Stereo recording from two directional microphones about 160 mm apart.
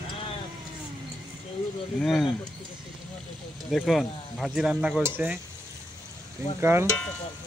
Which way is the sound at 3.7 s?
Centre (ahead or behind).